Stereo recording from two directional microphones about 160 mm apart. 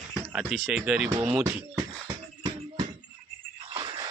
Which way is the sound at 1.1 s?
20° right (ahead or behind).